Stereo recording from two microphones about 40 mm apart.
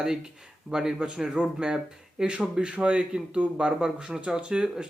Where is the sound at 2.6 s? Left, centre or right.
Right.